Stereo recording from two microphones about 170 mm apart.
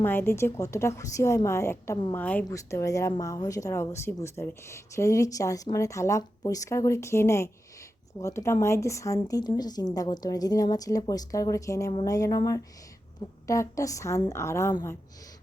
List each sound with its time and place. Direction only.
0.0 s a woman's voice: 10° left (ahead or behind)